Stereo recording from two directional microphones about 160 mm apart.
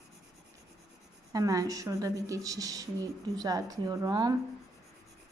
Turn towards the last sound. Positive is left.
turn(degrees=-25)  # may be behind; listen again after turning